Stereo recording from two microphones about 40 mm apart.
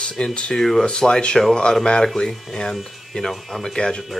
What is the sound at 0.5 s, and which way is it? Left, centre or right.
Speech, centre.